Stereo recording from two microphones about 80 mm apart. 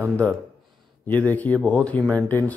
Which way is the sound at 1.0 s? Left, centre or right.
Left.